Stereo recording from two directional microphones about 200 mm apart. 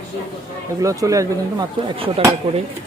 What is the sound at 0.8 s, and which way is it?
Speech, 15° right (ahead or behind).